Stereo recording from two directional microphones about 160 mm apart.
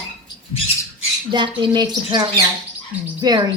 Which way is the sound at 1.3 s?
30° right (ahead or behind).